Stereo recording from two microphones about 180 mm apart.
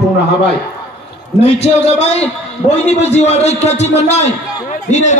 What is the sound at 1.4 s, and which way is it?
A man's voice, 35° left (ahead or behind).